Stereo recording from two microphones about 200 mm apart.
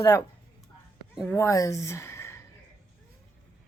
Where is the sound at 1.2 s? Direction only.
10° left (ahead or behind).